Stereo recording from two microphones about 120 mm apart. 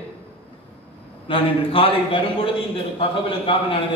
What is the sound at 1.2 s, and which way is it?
A man's voice, 50° left (ahead or behind).